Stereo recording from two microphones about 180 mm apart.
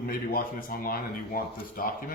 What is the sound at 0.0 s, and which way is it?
Speech, 55° left (ahead or behind).